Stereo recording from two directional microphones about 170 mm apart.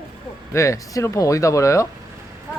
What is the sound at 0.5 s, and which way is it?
Speech, 20° left (ahead or behind).